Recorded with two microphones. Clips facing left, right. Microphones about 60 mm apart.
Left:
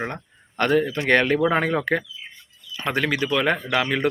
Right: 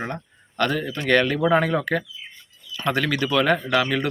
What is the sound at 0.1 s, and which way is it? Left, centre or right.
Speech, left.